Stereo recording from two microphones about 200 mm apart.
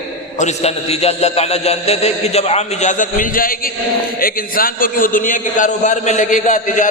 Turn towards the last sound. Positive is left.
turn(degrees=40)  # may be behind; listen again after turning